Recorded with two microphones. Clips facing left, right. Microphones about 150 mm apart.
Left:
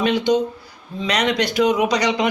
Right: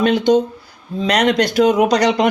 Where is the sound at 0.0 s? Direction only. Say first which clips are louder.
Right 4 dB; 50° right (ahead or behind).